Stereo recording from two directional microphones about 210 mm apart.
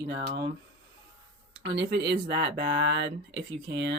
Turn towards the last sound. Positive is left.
turn(degrees=-55)  # may be behind; listen again after turning